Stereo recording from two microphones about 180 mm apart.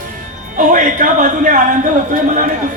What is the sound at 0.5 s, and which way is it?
A man's voice, 45° right (ahead or behind).